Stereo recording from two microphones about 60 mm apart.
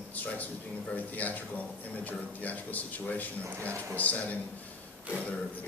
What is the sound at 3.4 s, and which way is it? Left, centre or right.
Speech, right.